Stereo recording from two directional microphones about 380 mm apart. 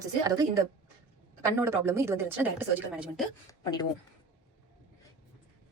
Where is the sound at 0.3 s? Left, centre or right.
Centre.